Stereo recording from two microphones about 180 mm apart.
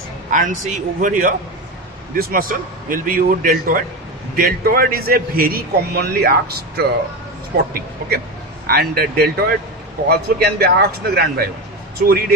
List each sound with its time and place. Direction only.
0.3 s a man's voice: 45° right (ahead or behind)
12.0 s a man's voice: 50° right (ahead or behind)